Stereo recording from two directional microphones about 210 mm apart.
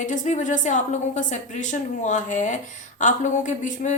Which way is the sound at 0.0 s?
35° left (ahead or behind).